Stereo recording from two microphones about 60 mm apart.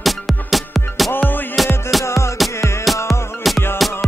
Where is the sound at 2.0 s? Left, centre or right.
Left.